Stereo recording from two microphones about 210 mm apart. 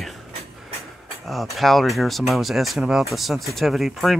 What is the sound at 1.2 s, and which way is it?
Speech, centre (ahead or behind).